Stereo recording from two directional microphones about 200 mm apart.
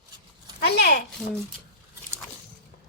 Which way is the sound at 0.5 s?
55° left (ahead or behind).